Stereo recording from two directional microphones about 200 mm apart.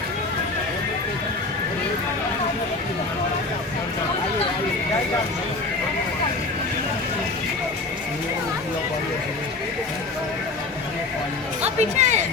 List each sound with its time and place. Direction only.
11.6 s music: 35° right (ahead or behind)